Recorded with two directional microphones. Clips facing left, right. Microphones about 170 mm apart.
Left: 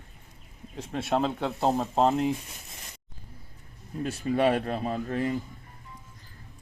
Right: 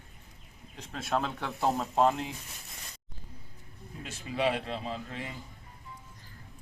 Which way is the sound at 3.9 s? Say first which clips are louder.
Left 12 dB; 45° left (ahead or behind).